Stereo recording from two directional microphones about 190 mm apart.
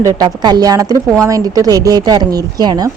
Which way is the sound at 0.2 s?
20° right (ahead or behind).